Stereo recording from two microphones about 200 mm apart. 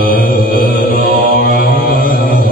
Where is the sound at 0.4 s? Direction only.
45° left (ahead or behind).